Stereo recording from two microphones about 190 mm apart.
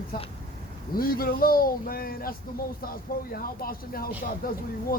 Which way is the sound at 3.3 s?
50° left (ahead or behind).